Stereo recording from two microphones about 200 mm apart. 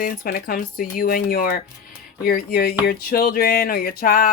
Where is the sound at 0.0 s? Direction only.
45° left (ahead or behind).